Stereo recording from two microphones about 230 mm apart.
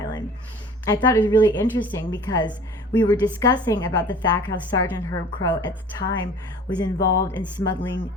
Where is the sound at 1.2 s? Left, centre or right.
Centre.